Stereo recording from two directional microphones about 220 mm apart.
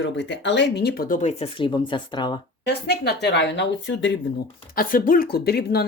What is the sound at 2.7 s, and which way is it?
Speech, 50° left (ahead or behind).